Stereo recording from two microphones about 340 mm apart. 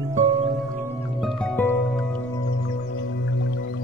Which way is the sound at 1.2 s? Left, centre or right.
Centre.